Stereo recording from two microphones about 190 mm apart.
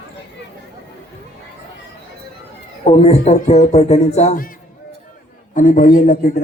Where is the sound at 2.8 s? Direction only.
35° left (ahead or behind).